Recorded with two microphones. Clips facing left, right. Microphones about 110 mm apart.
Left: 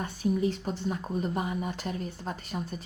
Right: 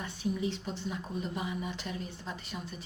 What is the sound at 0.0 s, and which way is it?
Speech, 45° left (ahead or behind).